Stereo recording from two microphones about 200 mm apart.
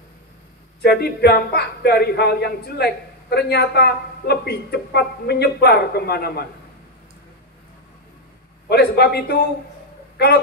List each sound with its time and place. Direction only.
0.8 s speech: 55° left (ahead or behind)
8.6 s speech: 55° left (ahead or behind)